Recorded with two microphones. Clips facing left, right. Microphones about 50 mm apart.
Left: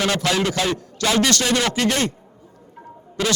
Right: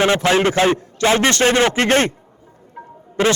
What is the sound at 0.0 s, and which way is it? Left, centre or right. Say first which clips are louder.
A man's voice: right 6 dB; right.